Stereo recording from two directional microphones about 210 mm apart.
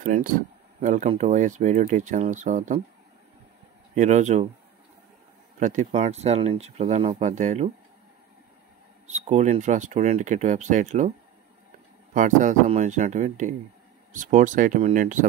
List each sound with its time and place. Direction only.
0.0 s speech: 40° right (ahead or behind)
3.9 s speech: 35° right (ahead or behind)
5.6 s speech: 35° right (ahead or behind)
9.0 s speech: 35° right (ahead or behind)